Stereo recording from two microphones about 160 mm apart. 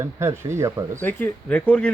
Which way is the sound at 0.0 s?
15° right (ahead or behind).